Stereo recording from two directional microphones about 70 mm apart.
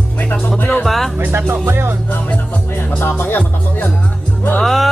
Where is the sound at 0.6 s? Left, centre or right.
Left.